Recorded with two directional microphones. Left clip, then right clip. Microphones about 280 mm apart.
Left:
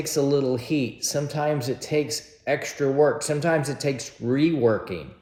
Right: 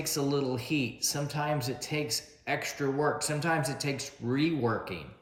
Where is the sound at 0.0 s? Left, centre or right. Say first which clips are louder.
Left 8 dB; centre.